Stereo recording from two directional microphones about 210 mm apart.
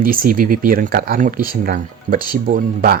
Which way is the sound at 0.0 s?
45° right (ahead or behind).